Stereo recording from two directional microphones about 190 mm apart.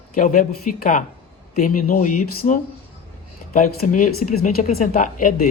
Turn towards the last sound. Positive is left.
turn(degrees=45)  # may be behind; listen again after turning